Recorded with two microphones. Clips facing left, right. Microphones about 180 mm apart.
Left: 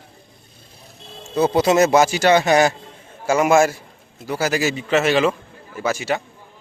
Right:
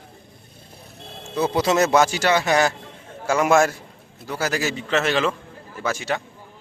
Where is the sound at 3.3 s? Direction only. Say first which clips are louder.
Left 2 dB; 5° left (ahead or behind).